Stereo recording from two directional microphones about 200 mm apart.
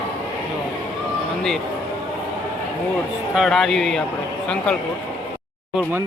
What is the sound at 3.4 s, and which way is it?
Speech, centre (ahead or behind).